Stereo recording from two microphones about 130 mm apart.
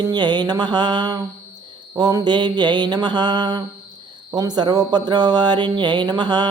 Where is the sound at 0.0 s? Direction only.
35° right (ahead or behind).